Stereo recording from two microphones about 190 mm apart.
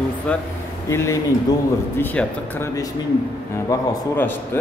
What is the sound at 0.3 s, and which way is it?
A man's voice, 5° left (ahead or behind).